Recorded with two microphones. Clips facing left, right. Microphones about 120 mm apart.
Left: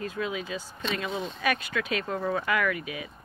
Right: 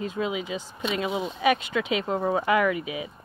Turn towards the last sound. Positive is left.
turn(degrees=-20)  # may be behind; listen again after turning